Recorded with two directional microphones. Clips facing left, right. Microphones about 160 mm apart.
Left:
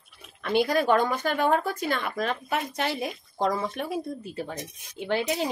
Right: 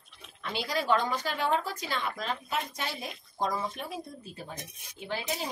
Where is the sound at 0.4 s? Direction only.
55° left (ahead or behind).